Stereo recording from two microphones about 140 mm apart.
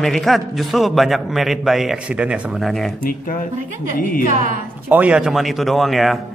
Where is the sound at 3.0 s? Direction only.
80° left.